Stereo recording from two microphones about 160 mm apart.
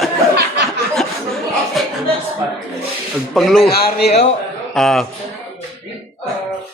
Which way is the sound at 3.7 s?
75° left (ahead or behind).